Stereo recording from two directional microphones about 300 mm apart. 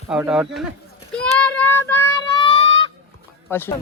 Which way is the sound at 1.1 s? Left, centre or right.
Centre.